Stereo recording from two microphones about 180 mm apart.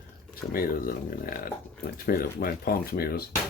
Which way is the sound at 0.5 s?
55° left (ahead or behind).